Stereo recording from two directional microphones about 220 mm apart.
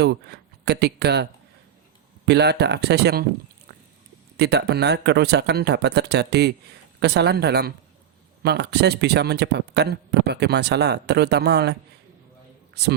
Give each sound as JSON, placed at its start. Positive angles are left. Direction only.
{"t": 0.0, "sound": "a man's voice", "side_deg": -50}
{"t": 4.4, "sound": "a man's voice", "side_deg": -50}